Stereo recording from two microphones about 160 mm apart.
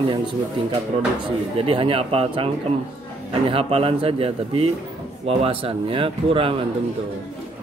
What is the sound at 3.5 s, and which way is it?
Speech, 35° right (ahead or behind).